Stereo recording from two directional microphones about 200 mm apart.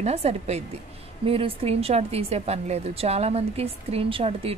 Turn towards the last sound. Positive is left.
turn(degrees=-30)  # may be behind; listen again after turning